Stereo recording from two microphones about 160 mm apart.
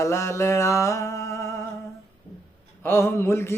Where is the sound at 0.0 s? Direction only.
20° left (ahead or behind).